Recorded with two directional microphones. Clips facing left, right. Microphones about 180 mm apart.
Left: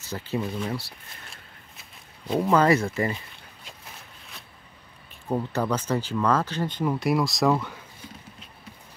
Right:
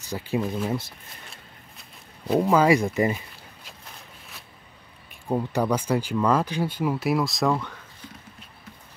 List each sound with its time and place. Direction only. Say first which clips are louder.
0.0 s speech: right 2 dB; 15° right (ahead or behind)
1.3 s a sound: right 1 dB; centre (ahead or behind)
5.3 s speech: right 2 dB; 15° right (ahead or behind); by 7.8 s 5° left (ahead or behind)